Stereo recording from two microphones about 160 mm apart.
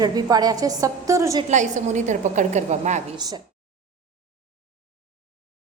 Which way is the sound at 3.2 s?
25° right (ahead or behind).